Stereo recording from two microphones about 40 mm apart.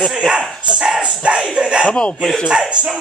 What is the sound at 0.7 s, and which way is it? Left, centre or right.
Speech, centre.